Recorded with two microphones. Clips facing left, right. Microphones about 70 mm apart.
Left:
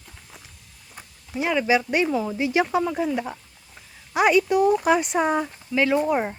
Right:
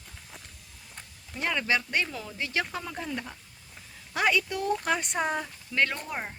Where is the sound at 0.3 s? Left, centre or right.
Centre.